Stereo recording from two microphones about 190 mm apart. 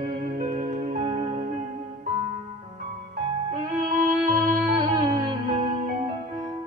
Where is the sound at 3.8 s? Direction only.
45° right (ahead or behind).